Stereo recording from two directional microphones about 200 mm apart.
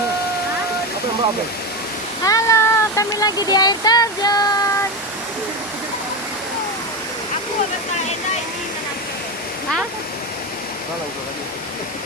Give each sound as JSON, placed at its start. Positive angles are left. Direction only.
{"t": 2.2, "sound": "speech", "side_deg": 15}